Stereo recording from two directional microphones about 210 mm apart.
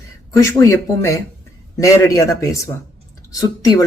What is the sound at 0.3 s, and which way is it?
Speech, 15° left (ahead or behind).